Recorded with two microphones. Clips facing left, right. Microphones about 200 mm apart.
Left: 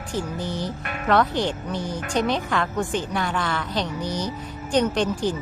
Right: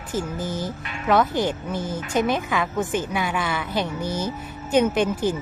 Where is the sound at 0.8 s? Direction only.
55° left (ahead or behind).